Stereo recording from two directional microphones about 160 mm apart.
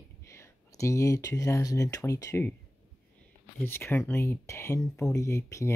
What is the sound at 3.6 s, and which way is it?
Speech, 15° left (ahead or behind).